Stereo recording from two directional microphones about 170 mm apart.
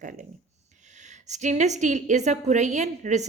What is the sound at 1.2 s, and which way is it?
A woman's voice, 45° right (ahead or behind).